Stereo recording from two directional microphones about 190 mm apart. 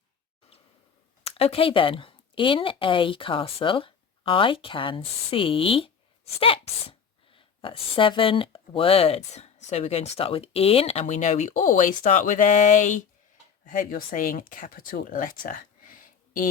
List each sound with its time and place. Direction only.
1.2 s a woman's voice: 30° left (ahead or behind)